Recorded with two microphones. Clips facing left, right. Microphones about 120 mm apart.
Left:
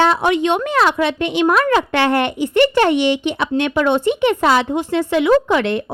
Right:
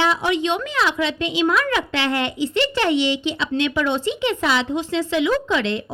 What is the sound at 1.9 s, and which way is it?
Speech, 60° left (ahead or behind).